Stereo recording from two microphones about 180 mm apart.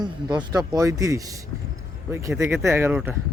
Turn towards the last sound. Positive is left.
turn(degrees=-10)  # may be behind; listen again after turning